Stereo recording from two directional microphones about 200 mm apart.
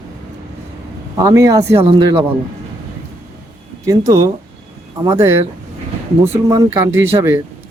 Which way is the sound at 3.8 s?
15° right (ahead or behind).